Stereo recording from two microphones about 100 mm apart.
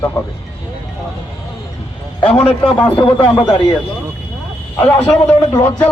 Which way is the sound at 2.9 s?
60° left (ahead or behind).